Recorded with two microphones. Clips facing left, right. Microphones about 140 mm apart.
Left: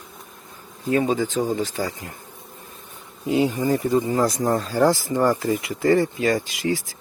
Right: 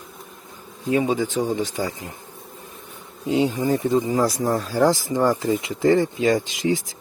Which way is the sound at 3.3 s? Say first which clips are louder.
Even; 10° right (ahead or behind).